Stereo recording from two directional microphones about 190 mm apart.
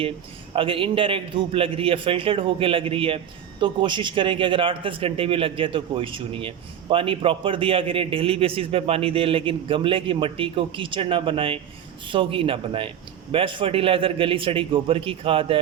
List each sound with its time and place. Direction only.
0.5 s a man's voice: 30° right (ahead or behind)